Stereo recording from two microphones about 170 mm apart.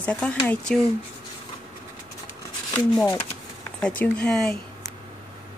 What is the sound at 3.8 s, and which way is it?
Speech, 5° left (ahead or behind).